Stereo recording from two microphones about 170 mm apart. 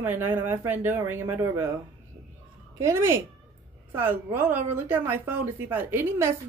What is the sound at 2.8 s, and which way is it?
A woman's voice, 15° right (ahead or behind).